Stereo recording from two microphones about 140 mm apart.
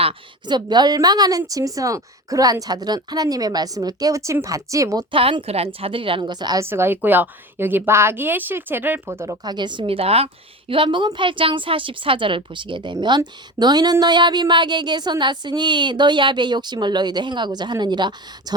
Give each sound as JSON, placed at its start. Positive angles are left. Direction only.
{"t": 0.0, "sound": "a woman's voice", "side_deg": -35}
{"t": 5.1, "sound": "a woman's voice", "side_deg": -40}
{"t": 6.7, "sound": "a woman's voice", "side_deg": -15}